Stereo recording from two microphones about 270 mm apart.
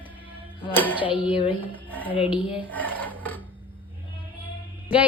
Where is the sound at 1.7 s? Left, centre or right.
Centre.